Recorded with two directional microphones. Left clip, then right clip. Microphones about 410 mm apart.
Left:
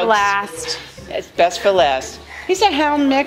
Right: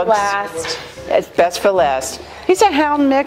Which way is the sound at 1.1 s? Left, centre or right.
Right.